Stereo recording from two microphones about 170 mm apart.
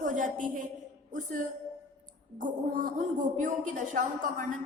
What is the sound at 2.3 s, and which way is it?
A woman's voice, 50° right (ahead or behind).